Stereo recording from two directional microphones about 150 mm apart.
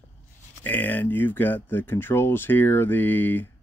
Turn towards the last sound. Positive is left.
turn(degrees=15)  # may be behind; listen again after turning